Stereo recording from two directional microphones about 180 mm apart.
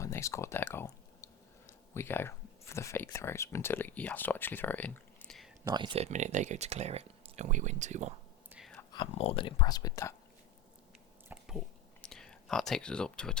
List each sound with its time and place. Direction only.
0.0 s a sound: 15° left (ahead or behind)
1.9 s speech: 15° left (ahead or behind)
5.6 s speech: 25° right (ahead or behind); by 8.1 s 40° right (ahead or behind)
8.9 s speech: 30° left (ahead or behind)
11.3 s a sound: 5° right (ahead or behind)
12.0 s speech: 5° left (ahead or behind)